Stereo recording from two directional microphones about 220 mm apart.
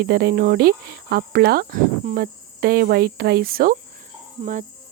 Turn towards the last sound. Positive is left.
turn(degrees=-25)  # may be behind; listen again after turning